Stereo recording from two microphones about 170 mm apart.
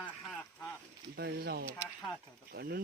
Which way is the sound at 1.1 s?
70° right (ahead or behind).